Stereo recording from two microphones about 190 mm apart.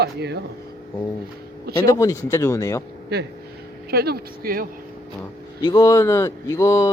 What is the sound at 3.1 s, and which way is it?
Speech, 60° right (ahead or behind).